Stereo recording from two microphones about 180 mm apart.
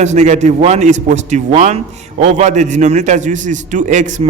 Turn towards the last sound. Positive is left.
turn(degrees=-45)  # may be behind; listen again after turning